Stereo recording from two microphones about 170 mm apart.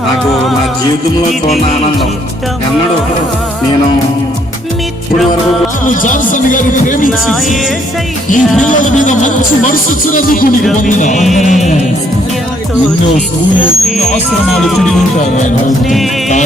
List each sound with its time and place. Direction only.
5.8 s speech: 50° left (ahead or behind)
8.3 s speech: 50° left (ahead or behind)
14.4 s music: centre (ahead or behind)